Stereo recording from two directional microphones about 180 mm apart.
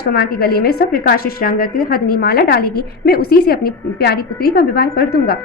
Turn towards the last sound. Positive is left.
turn(degrees=60)  # may be behind; listen again after turning